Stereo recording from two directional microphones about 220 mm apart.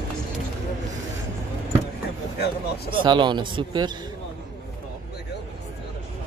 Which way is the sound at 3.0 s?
20° right (ahead or behind).